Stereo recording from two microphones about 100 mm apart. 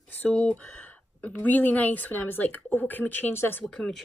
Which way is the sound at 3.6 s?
5° left (ahead or behind).